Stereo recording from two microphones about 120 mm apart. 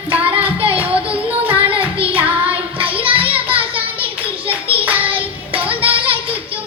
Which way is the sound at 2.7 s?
50° right (ahead or behind).